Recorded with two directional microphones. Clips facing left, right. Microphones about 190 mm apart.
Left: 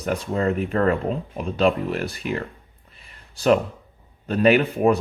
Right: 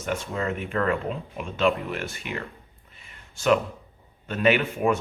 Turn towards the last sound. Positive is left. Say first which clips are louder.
# left 5 dB
turn(degrees=35)  # may be behind; listen again after turning